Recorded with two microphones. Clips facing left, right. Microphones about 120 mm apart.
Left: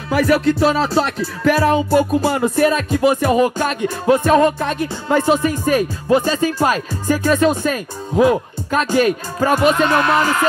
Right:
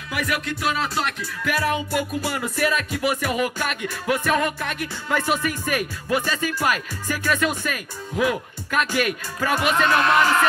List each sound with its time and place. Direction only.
0.1 s music: 35° left (ahead or behind)